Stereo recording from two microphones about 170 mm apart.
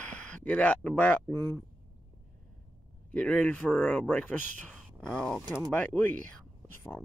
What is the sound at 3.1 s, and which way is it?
Speech, 10° left (ahead or behind).